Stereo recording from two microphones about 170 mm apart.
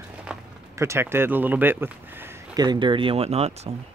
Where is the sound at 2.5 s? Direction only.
25° right (ahead or behind).